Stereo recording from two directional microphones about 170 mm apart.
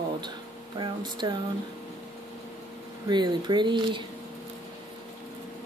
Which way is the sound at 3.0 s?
25° right (ahead or behind).